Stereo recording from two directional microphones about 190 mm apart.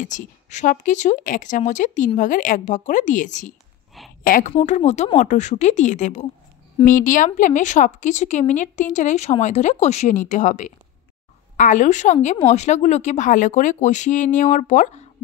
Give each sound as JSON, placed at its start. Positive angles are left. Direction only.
{"t": 0.0, "sound": "a woman's voice", "side_deg": 40}